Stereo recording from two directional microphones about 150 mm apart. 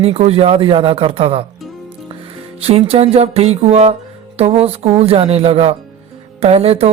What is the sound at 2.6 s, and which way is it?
Music, 40° right (ahead or behind).